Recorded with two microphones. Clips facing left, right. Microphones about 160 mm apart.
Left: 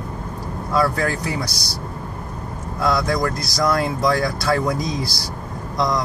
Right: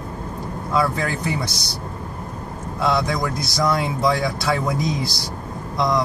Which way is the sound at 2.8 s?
25° right (ahead or behind).